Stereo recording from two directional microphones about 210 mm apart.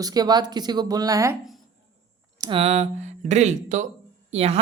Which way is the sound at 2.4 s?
25° right (ahead or behind).